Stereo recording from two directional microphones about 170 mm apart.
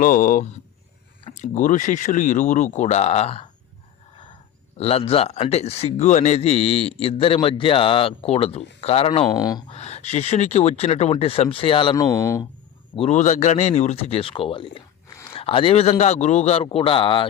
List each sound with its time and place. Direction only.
0.0 s speech: 55° left (ahead or behind); by 3.5 s 35° left (ahead or behind)
4.8 s a man's voice: 35° left (ahead or behind)
9.3 s speech: 20° left (ahead or behind)
9.7 s a man's voice: 40° left (ahead or behind)
12.1 s speech: 20° left (ahead or behind)
13.0 s a man's voice: 45° left (ahead or behind)